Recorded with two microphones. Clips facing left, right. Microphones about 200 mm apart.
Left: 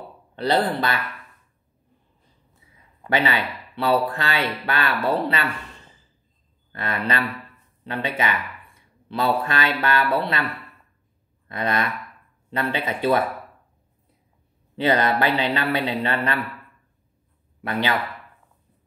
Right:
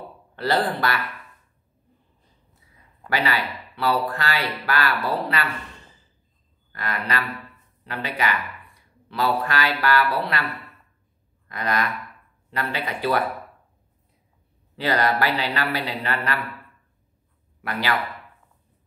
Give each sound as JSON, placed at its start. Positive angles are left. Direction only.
{"t": 0.4, "sound": "speech", "side_deg": 20}
{"t": 3.1, "sound": "speech", "side_deg": 25}
{"t": 6.7, "sound": "speech", "side_deg": 25}
{"t": 9.1, "sound": "speech", "side_deg": 25}
{"t": 11.4, "sound": "speech", "side_deg": 25}
{"t": 14.8, "sound": "speech", "side_deg": 20}
{"t": 17.6, "sound": "speech", "side_deg": 20}